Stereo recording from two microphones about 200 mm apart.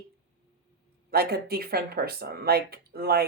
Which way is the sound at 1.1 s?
50° right (ahead or behind).